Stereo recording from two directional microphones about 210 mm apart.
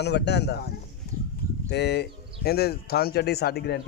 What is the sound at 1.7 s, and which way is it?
Speech, 50° left (ahead or behind).